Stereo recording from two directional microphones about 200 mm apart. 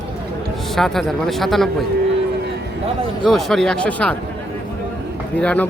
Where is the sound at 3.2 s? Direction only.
Centre (ahead or behind).